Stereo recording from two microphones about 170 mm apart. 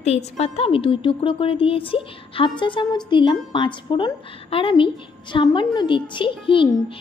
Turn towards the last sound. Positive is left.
turn(degrees=25)  # may be behind; listen again after turning